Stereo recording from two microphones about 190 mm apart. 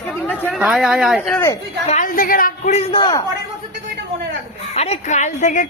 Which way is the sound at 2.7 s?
30° left (ahead or behind).